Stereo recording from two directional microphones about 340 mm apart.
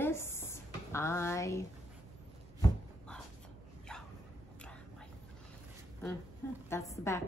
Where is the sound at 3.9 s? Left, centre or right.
Centre.